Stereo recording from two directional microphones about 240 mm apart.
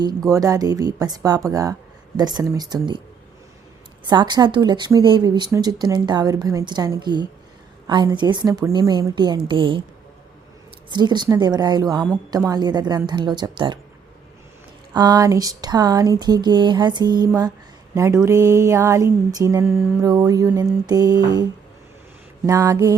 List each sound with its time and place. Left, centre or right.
0.0 s a woman's voice: centre
4.0 s a woman's voice: centre
10.9 s a woman's voice: centre
14.9 s a woman's voice: centre
22.4 s a woman's voice: centre